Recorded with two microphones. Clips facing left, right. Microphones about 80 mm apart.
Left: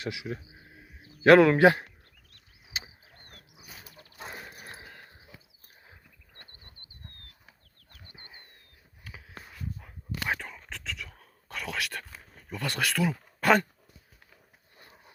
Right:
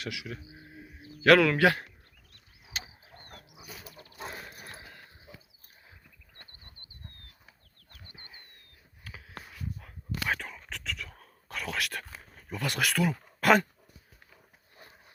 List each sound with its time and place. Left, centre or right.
0.0 s speech: left
4.3 s horse: centre
4.6 s a sound: left
8.1 s a sound: centre
9.4 s whispering: centre
10.8 s whispering: centre
11.1 s whispering: centre
11.9 s dog: centre
12.5 s speech: centre